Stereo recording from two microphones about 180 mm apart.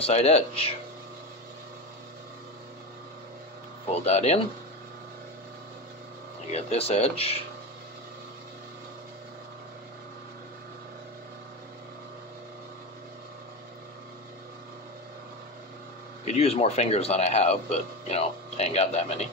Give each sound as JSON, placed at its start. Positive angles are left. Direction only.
{"t": 0.0, "sound": "speech", "side_deg": 35}
{"t": 4.0, "sound": "speech", "side_deg": 35}
{"t": 6.5, "sound": "speech", "side_deg": 35}
{"t": 16.3, "sound": "speech", "side_deg": 35}